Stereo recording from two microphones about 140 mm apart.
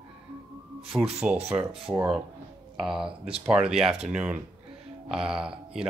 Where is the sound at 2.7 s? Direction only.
5° right (ahead or behind).